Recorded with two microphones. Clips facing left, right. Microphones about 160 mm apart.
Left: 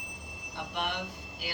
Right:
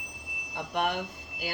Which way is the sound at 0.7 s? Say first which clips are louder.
Right 6 dB; 50° right (ahead or behind).